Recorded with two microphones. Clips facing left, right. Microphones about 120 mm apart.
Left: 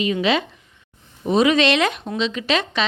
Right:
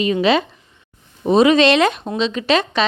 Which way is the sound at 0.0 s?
35° right (ahead or behind).